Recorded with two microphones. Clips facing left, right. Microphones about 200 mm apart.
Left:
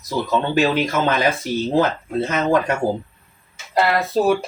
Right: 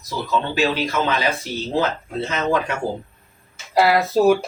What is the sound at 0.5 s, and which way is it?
A man's voice, 50° left (ahead or behind).